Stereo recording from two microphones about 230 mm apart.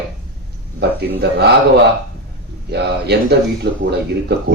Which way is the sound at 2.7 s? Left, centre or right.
Right.